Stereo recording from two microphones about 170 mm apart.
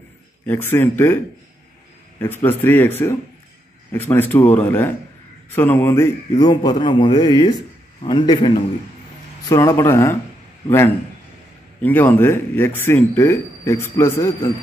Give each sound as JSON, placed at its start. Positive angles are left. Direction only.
{"t": 0.5, "sound": "speech", "side_deg": 15}
{"t": 6.3, "sound": "speech", "side_deg": 25}
{"t": 9.5, "sound": "speech", "side_deg": 15}
{"t": 11.8, "sound": "speech", "side_deg": 10}